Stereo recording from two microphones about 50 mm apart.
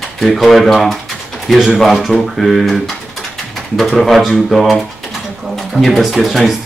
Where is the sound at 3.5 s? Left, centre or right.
Centre.